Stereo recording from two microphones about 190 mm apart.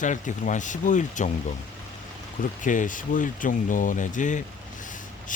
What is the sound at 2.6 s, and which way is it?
Speech, 45° left (ahead or behind).